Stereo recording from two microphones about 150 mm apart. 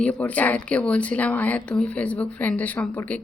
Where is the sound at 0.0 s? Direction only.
10° left (ahead or behind).